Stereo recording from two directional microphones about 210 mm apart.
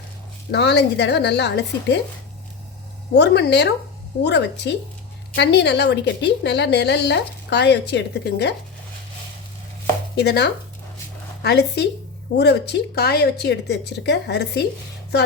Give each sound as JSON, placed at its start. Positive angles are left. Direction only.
{"t": 0.5, "sound": "a woman's voice", "side_deg": 55}
{"t": 3.2, "sound": "a woman's voice", "side_deg": 55}
{"t": 10.2, "sound": "a woman's voice", "side_deg": 50}